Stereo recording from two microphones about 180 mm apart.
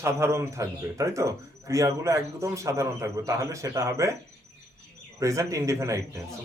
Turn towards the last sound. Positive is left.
turn(degrees=-15)  # may be behind; listen again after turning